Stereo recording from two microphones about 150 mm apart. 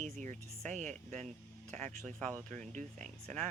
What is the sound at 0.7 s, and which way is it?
Speech, 55° right (ahead or behind).